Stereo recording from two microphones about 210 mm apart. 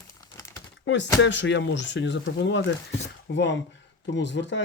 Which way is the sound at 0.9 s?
60° left (ahead or behind).